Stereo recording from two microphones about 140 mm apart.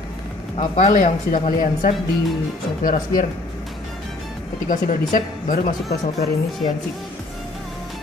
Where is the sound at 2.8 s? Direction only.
80° left.